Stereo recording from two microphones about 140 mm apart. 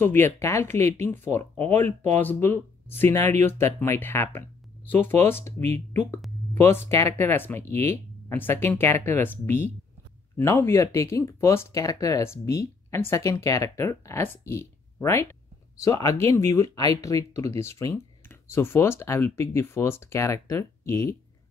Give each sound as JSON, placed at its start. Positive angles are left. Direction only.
{"t": 0.0, "sound": "speech", "side_deg": 15}
{"t": 6.5, "sound": "speech", "side_deg": 15}